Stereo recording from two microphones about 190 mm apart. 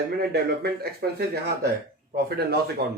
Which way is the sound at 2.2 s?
55° right (ahead or behind).